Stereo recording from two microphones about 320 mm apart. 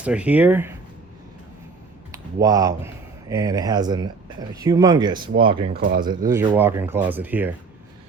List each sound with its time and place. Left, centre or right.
0.0 s speech: centre
2.1 s speech: centre
5.7 s speech: right
6.2 s speech: centre